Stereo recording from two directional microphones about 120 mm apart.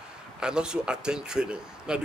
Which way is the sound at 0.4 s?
5° right (ahead or behind).